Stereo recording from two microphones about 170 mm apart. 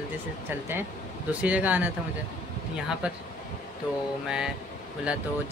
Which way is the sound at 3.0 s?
10° right (ahead or behind).